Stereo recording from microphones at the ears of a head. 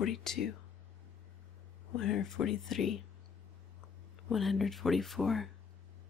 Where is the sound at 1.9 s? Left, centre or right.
Left.